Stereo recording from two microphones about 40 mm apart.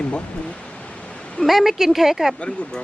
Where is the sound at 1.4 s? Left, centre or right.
Centre.